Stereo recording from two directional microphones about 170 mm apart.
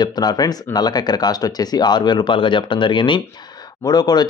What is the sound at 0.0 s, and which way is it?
A man's voice, 25° left (ahead or behind).